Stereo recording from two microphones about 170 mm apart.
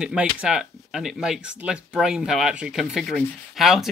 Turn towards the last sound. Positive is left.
turn(degrees=0)  # may be behind; listen again after turning